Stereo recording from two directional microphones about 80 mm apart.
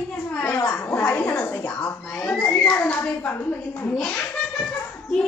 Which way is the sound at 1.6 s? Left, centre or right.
Centre.